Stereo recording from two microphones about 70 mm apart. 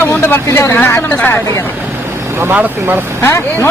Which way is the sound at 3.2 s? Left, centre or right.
Left.